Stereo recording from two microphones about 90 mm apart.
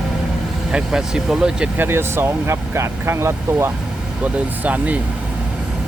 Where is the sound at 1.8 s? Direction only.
25° right (ahead or behind).